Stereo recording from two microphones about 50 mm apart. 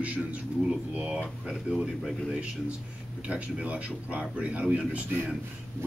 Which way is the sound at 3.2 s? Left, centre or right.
Right.